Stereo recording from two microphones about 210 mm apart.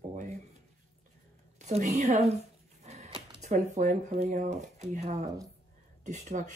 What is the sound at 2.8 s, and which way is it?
Dog, 30° right (ahead or behind).